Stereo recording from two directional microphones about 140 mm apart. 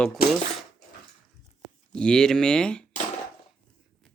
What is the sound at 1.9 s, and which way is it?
Speech, 5° left (ahead or behind).